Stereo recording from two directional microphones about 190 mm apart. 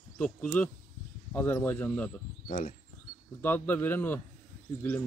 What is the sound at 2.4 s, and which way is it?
Speech, 45° left (ahead or behind).